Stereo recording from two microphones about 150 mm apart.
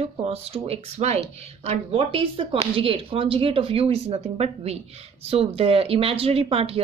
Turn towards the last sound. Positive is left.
turn(degrees=-40)  # may be behind; listen again after turning